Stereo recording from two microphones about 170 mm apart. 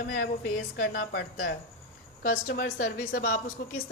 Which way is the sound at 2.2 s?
55° left (ahead or behind).